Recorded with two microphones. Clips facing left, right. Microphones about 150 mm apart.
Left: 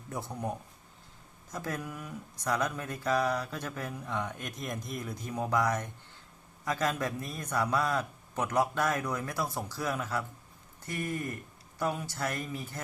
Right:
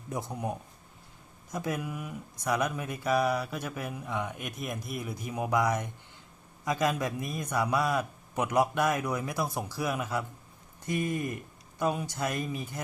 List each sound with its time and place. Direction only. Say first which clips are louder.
0.1 s speech: right 2 dB; 15° right (ahead or behind)
1.5 s speech: right 4 dB; 10° right (ahead or behind)